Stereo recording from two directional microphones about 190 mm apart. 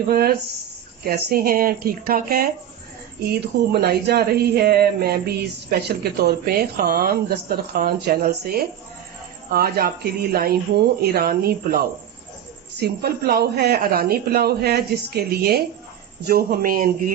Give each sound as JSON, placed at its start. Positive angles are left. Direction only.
{"t": 0.1, "sound": "a woman's voice", "side_deg": -55}